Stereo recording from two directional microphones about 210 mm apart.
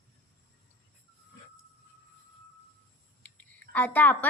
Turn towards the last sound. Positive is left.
turn(degrees=10)  # may be behind; listen again after turning